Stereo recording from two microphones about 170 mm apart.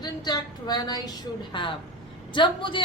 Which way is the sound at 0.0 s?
25° left (ahead or behind).